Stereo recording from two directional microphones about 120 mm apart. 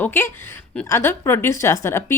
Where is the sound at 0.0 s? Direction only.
20° left (ahead or behind).